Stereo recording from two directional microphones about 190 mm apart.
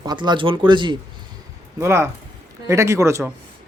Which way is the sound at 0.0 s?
20° right (ahead or behind).